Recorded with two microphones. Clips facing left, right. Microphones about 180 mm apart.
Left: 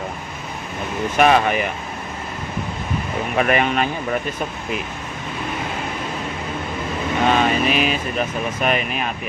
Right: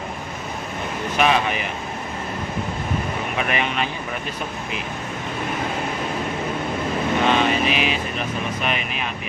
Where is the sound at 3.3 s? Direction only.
45° left (ahead or behind).